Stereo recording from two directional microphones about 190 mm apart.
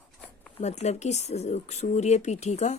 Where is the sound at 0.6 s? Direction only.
35° left (ahead or behind).